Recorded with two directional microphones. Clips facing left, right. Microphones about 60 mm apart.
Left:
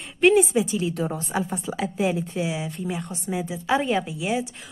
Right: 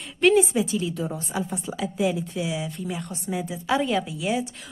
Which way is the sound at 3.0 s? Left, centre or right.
Centre.